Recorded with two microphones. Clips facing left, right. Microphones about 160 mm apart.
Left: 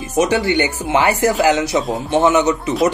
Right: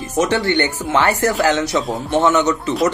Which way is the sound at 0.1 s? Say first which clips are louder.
Left 1 dB; 15° left (ahead or behind).